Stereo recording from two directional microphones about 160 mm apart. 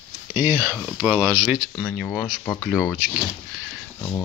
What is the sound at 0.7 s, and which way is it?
Speech, centre (ahead or behind).